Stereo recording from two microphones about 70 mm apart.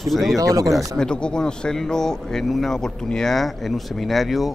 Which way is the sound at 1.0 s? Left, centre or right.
Centre.